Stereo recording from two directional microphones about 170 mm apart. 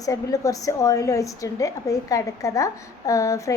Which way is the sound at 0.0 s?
20° left (ahead or behind).